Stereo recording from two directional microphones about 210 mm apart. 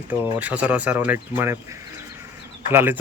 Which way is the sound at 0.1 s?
5° right (ahead or behind).